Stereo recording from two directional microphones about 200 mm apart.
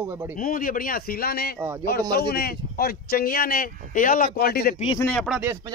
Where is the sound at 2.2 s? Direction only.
50° left (ahead or behind).